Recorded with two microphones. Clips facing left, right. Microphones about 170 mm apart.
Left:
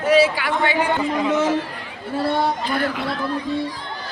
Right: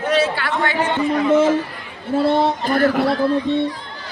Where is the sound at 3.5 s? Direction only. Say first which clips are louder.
Right 5 dB; 25° right (ahead or behind).